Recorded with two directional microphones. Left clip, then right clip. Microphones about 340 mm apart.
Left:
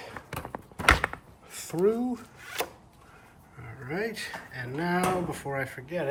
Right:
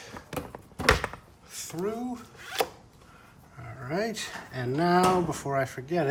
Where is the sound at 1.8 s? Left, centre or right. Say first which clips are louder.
Left 7 dB; centre.